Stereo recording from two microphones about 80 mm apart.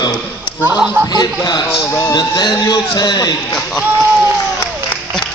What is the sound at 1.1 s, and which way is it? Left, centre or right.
A man's voice, left.